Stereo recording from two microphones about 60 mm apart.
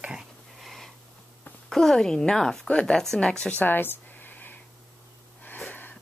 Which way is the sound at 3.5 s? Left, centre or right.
Left.